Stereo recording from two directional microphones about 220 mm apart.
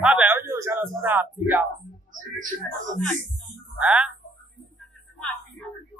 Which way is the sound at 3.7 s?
5° right (ahead or behind).